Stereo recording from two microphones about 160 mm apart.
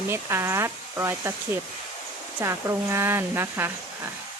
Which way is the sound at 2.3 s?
15° right (ahead or behind).